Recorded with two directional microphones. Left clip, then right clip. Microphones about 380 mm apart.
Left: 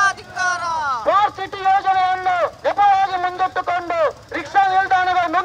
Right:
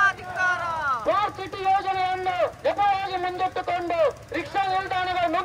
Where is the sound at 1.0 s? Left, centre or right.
Centre.